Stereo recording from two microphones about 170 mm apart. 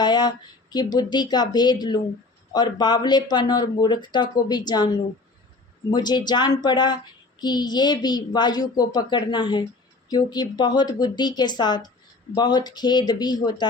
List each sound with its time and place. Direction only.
0.0 s a woman's voice: 25° left (ahead or behind)
5.9 s a woman's voice: 25° left (ahead or behind)